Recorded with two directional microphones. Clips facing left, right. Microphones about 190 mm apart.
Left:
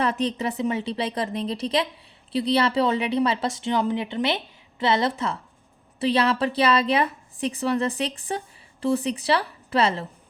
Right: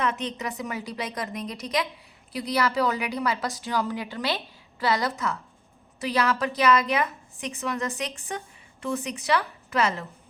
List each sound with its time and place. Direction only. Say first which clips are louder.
0.0 s a woman's voice: left 4 dB; 35° left (ahead or behind)